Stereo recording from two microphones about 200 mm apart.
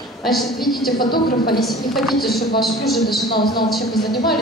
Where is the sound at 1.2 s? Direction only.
45° left (ahead or behind).